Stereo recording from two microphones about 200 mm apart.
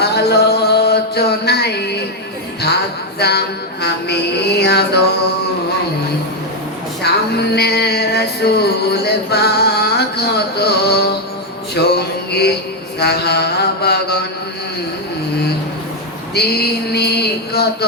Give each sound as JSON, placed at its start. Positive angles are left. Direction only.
{"t": 0.0, "sound": "mantra", "side_deg": 55}
{"t": 3.2, "sound": "mantra", "side_deg": 55}
{"t": 7.0, "sound": "music", "side_deg": 55}
{"t": 11.7, "sound": "a sound", "side_deg": 55}
{"t": 13.0, "sound": "mantra", "side_deg": 55}
{"t": 16.3, "sound": "a sound", "side_deg": 55}